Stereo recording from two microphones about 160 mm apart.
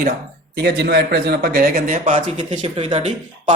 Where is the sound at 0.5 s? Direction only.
90° right.